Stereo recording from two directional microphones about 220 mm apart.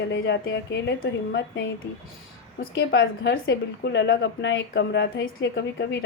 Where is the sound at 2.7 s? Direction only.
55° left (ahead or behind).